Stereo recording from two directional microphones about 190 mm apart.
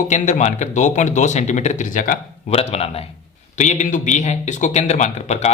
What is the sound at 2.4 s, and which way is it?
Speech, 30° left (ahead or behind).